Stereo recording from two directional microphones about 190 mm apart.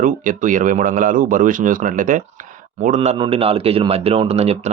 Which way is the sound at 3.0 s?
25° right (ahead or behind).